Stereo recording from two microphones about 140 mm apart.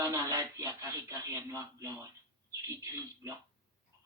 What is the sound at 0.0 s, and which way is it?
Speech, 25° right (ahead or behind).